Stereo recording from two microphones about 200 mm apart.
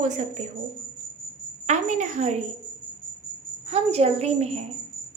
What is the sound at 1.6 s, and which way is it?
Speech, 35° right (ahead or behind).